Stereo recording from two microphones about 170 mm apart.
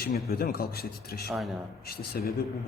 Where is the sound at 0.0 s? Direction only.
65° left (ahead or behind).